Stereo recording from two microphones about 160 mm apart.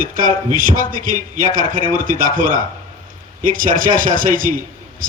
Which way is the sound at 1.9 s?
25° left (ahead or behind).